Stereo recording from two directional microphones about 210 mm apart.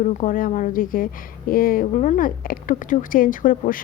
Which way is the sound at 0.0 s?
35° left (ahead or behind).